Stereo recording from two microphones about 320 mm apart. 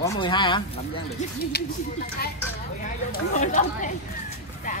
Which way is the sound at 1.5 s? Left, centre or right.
Left.